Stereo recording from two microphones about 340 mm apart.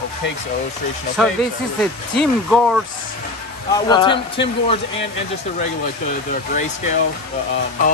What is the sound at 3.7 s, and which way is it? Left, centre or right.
A man's voice, centre.